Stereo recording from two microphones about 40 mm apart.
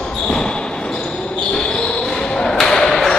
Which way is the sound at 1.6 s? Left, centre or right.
Centre.